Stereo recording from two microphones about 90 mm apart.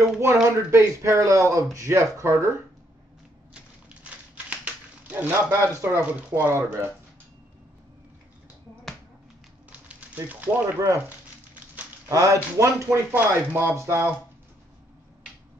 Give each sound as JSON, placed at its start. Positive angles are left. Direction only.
{"t": 0.0, "sound": "speech", "side_deg": -30}
{"t": 3.5, "sound": "a sound", "side_deg": -15}
{"t": 5.5, "sound": "speech", "side_deg": -30}
{"t": 9.7, "sound": "a sound", "side_deg": -15}
{"t": 12.1, "sound": "speech", "side_deg": -35}
{"t": 13.1, "sound": "speech", "side_deg": -20}